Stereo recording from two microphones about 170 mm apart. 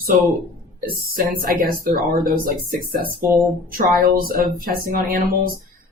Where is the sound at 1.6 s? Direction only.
55° right (ahead or behind).